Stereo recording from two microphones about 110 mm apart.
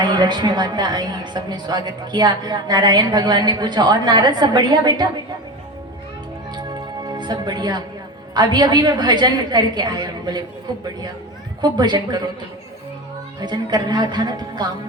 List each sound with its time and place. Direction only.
0.0 s a woman's voice: 40° right (ahead or behind)
6.6 s music: 40° right (ahead or behind)
8.3 s a woman's voice: 40° right (ahead or behind)
11.6 s a woman's voice: 40° right (ahead or behind)
13.4 s a woman's voice: 40° right (ahead or behind)